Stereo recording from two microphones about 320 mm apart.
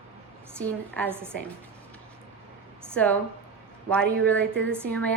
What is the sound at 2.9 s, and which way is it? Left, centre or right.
A woman's voice, centre.